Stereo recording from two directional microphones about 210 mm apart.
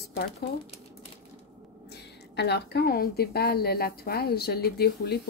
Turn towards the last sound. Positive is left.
turn(degrees=50)  # may be behind; listen again after turning